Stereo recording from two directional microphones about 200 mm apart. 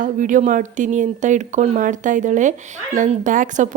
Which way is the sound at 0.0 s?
40° right (ahead or behind).